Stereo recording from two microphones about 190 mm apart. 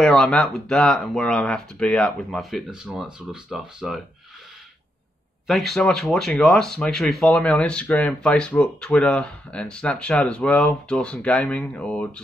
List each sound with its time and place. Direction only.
0.0 s speech: 5° left (ahead or behind)
5.5 s speech: centre (ahead or behind)